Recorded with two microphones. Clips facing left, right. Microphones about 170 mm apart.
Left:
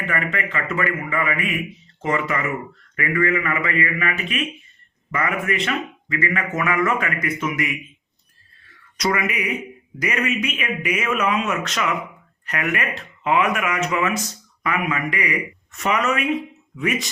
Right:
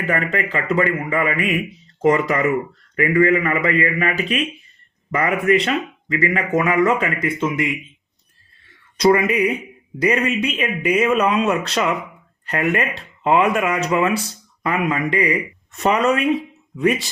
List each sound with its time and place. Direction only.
0.0 s a man's voice: 35° right (ahead or behind)
9.0 s a man's voice: 30° right (ahead or behind)